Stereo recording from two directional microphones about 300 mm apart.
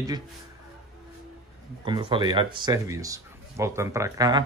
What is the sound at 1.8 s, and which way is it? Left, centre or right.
Speech, centre.